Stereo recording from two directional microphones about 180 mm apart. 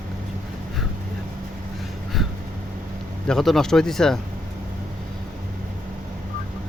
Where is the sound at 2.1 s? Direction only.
Centre (ahead or behind).